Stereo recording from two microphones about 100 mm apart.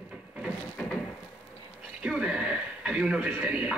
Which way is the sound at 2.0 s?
5° right (ahead or behind).